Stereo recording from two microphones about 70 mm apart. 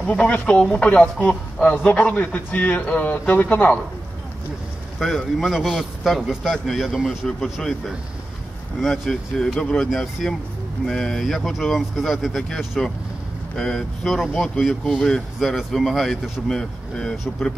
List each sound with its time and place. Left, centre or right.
0.1 s a man's voice: centre
4.9 s a man's voice: centre
8.8 s a man's voice: centre
15.4 s a man's voice: centre